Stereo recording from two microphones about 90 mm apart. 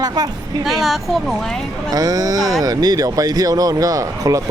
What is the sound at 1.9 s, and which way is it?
Speech, 40° right (ahead or behind).